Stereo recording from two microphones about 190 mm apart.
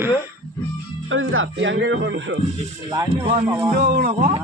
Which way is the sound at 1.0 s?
90° right.